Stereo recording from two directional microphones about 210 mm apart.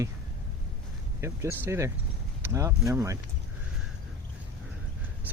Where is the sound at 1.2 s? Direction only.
10° right (ahead or behind).